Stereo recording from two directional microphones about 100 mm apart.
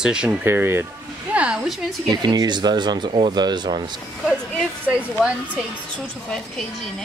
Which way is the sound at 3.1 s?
60° right (ahead or behind).